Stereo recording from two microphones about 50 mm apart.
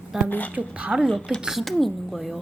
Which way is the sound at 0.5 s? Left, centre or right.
Right.